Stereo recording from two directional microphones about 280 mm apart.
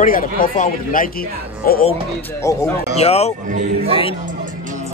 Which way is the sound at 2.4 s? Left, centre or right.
Centre.